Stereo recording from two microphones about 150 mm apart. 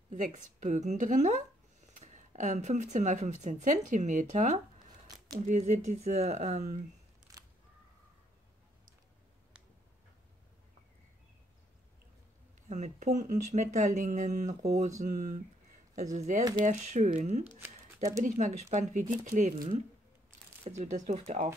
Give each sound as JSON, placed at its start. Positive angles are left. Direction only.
{"t": 0.1, "sound": "speech", "side_deg": -55}
{"t": 7.3, "sound": "a sound", "side_deg": -20}
{"t": 12.6, "sound": "speech", "side_deg": -50}
{"t": 17.6, "sound": "a sound", "side_deg": -20}
{"t": 18.2, "sound": "speech", "side_deg": -55}
{"t": 20.2, "sound": "speech", "side_deg": -50}